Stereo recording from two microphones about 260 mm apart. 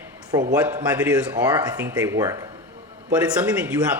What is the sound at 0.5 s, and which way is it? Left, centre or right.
Speech, centre.